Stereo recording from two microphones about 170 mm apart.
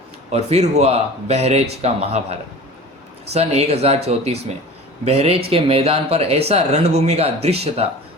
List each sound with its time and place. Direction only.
0.3 s speech: 40° right (ahead or behind)
3.3 s speech: 40° right (ahead or behind)